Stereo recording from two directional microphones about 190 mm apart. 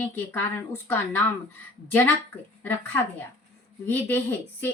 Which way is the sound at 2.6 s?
10° left (ahead or behind).